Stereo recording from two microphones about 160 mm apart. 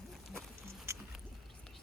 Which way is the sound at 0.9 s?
15° right (ahead or behind).